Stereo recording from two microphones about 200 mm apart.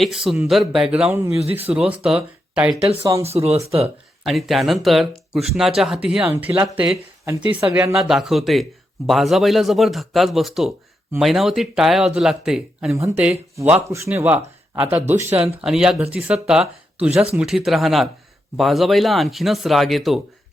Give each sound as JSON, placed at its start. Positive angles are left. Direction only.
{"t": 0.0, "sound": "speech", "side_deg": 0}
{"t": 1.4, "sound": "speech", "side_deg": -30}
{"t": 1.6, "sound": "speech", "side_deg": -5}
{"t": 3.2, "sound": "speech", "side_deg": -30}
{"t": 4.2, "sound": "speech", "side_deg": 0}
{"t": 7.9, "sound": "speech", "side_deg": 0}